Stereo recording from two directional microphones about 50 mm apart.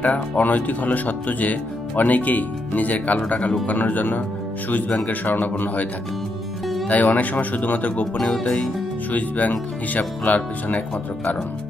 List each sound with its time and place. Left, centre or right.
0.0 s speech: left
6.9 s speech: left
9.1 s speech: left